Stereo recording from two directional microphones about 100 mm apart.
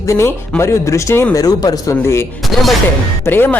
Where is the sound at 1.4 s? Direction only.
40° left (ahead or behind).